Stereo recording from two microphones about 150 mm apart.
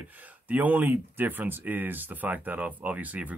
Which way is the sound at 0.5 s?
10° right (ahead or behind).